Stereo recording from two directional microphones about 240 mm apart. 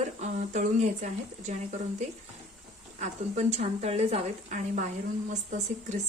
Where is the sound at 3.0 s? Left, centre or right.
Right.